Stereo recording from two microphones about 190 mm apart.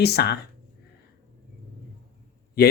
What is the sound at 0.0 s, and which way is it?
Speech, 60° left (ahead or behind).